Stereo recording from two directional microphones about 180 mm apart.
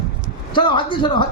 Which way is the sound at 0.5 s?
25° left (ahead or behind).